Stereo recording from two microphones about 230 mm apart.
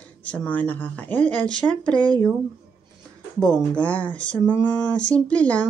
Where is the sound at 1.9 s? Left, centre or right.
Centre.